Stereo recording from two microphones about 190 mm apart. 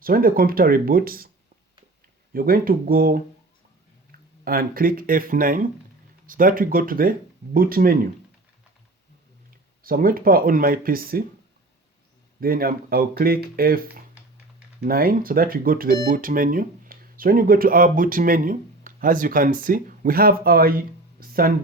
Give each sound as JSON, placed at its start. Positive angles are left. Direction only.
{"t": 0.0, "sound": "speech", "side_deg": -50}
{"t": 2.3, "sound": "speech", "side_deg": -50}
{"t": 4.4, "sound": "speech", "side_deg": -50}
{"t": 9.8, "sound": "speech", "side_deg": -50}
{"t": 12.4, "sound": "speech", "side_deg": -50}
{"t": 14.8, "sound": "speech", "side_deg": -50}